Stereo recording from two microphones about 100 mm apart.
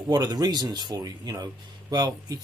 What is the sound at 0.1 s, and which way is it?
Speech, 40° right (ahead or behind).